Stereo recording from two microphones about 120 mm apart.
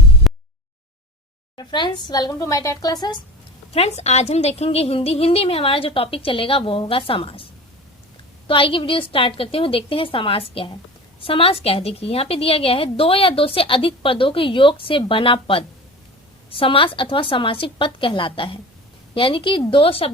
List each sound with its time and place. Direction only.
0.2 s a sound: centre (ahead or behind)
1.5 s speech: 40° left (ahead or behind)
3.7 s a woman's voice: 60° left (ahead or behind)
8.4 s a woman's voice: 45° left (ahead or behind)